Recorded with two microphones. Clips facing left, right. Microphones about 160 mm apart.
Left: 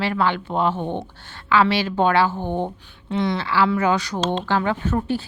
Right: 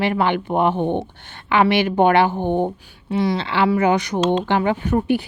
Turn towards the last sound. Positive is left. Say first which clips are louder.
# right 4 dB
turn(degrees=-15)  # may be behind; listen again after turning